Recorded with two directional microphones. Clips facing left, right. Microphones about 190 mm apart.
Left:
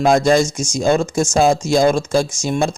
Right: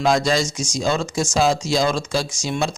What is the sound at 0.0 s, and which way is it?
Speech, 50° left (ahead or behind).